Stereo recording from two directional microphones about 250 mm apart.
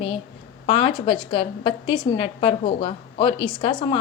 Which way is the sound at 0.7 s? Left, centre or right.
Left.